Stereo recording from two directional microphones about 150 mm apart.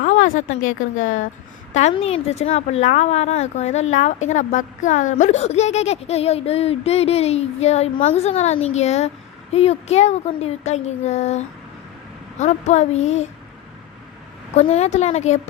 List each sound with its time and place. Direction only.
0.0 s a woman's voice: 60° left (ahead or behind)
1.7 s a woman's voice: 45° left (ahead or behind)
14.5 s a woman's voice: 45° left (ahead or behind)